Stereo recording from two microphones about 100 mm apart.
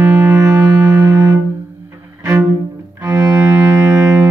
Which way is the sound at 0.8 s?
20° right (ahead or behind).